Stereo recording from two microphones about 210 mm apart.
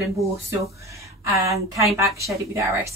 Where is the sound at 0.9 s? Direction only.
15° right (ahead or behind).